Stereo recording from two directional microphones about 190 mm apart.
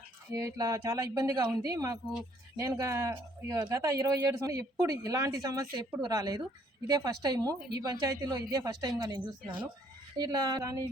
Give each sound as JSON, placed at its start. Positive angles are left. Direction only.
{"t": 0.3, "sound": "a woman's voice", "side_deg": -20}